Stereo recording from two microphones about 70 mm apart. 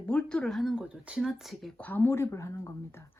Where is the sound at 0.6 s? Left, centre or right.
Centre.